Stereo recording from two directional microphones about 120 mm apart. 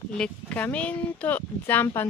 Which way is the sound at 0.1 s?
10° left (ahead or behind).